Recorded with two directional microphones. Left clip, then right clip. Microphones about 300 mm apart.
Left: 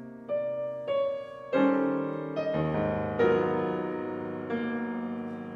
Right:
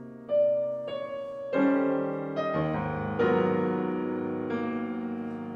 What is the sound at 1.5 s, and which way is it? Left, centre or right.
Music, left.